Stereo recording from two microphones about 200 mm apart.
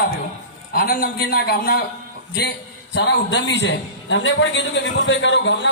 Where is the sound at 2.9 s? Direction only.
60° left (ahead or behind).